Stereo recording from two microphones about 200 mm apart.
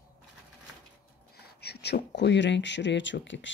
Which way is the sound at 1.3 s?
55° left (ahead or behind).